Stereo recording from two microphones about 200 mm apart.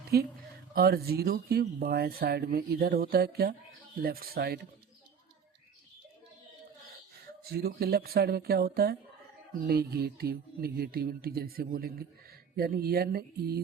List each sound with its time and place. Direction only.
0.1 s speech: 50° right (ahead or behind)
7.4 s speech: 50° right (ahead or behind)